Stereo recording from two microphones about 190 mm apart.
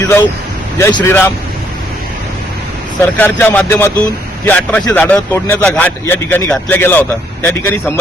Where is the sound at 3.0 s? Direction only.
10° left (ahead or behind).